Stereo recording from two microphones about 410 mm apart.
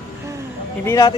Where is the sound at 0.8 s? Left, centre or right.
Centre.